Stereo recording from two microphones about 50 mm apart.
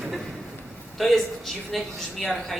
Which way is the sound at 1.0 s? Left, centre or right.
Centre.